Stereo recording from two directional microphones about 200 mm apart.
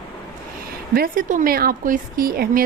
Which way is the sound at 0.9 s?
45° right (ahead or behind).